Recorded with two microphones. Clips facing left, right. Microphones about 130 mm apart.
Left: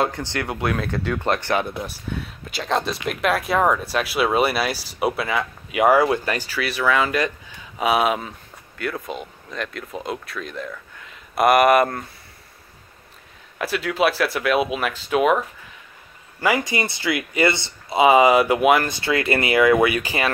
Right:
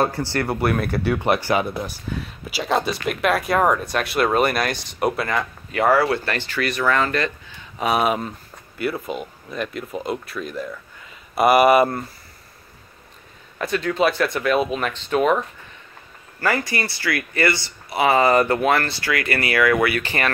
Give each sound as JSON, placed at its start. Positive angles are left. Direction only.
{"t": 0.0, "sound": "speech", "side_deg": -5}
{"t": 13.6, "sound": "speech", "side_deg": 5}